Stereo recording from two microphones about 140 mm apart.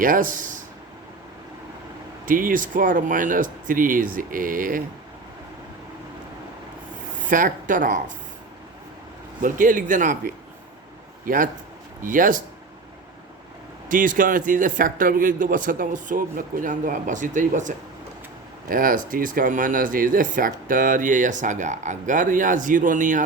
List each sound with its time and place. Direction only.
0.0 s speech: 75° right (ahead or behind)
2.2 s speech: 75° right (ahead or behind)
7.3 s speech: 75° right (ahead or behind)
9.4 s speech: 70° right (ahead or behind)
13.8 s speech: 75° right (ahead or behind)
18.7 s speech: 85° right; by 23.2 s 65° right (ahead or behind)